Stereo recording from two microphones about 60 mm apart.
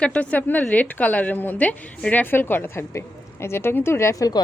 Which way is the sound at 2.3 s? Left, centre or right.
Left.